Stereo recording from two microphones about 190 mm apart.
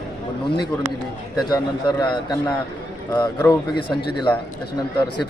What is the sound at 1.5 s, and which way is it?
A man's voice, 20° left (ahead or behind).